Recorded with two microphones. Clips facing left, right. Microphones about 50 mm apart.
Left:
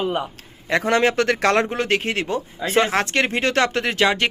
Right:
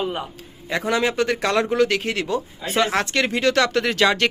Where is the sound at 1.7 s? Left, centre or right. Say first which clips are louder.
Right 2 dB; left.